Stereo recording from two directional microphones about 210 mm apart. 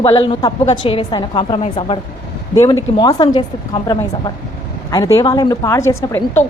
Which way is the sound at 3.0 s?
20° left (ahead or behind).